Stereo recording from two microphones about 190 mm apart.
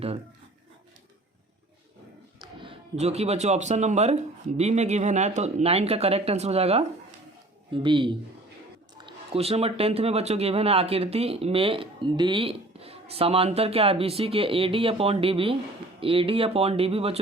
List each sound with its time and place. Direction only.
2.6 s speech: 30° right (ahead or behind)